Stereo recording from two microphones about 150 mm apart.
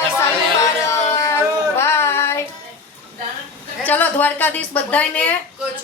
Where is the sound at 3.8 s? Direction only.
10° left (ahead or behind).